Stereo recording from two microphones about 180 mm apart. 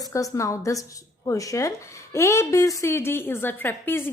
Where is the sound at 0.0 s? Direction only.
20° left (ahead or behind).